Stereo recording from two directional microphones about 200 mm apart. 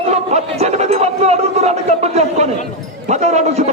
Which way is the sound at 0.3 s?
35° right (ahead or behind).